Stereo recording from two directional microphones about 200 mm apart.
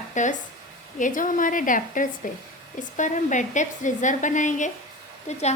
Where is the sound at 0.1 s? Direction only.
40° left (ahead or behind).